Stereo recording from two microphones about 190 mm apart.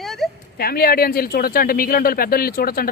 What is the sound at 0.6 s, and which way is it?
Speech, 55° left (ahead or behind).